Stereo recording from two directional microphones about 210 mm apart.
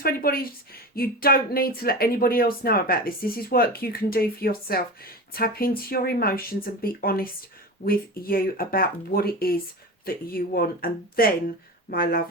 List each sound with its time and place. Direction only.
0.0 s speech: 45° left (ahead or behind)